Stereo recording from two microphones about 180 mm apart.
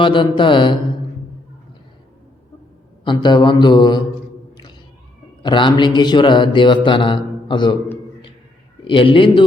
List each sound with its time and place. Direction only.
0.0 s speech: 25° left (ahead or behind)
3.0 s speech: 25° left (ahead or behind)
5.4 s speech: 25° left (ahead or behind)
8.8 s a man's voice: 30° left (ahead or behind)